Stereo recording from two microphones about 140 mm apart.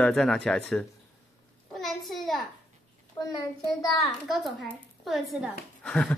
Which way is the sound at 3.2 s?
25° left (ahead or behind).